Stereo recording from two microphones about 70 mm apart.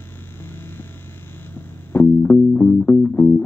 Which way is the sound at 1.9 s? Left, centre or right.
Left.